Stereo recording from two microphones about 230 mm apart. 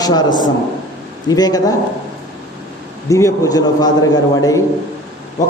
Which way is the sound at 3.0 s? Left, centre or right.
Centre.